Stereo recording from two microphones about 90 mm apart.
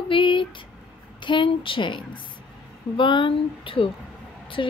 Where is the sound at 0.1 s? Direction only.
65° left (ahead or behind).